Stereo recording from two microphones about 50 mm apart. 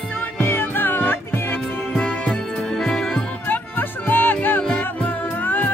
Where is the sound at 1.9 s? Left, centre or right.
Left.